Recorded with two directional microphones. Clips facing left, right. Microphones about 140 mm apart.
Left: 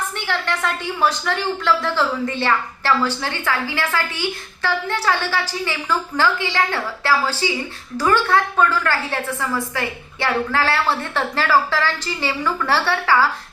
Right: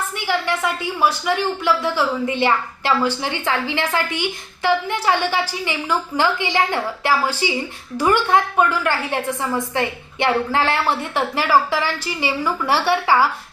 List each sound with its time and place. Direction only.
0.2 s a woman's voice: 10° right (ahead or behind)